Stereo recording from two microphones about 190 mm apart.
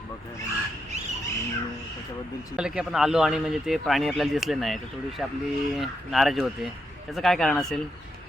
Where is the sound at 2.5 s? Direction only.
5° right (ahead or behind).